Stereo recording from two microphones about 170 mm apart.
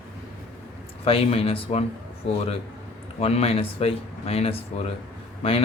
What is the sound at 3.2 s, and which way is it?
A man's voice, 35° left (ahead or behind).